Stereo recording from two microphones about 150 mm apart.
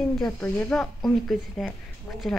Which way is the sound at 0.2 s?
5° left (ahead or behind).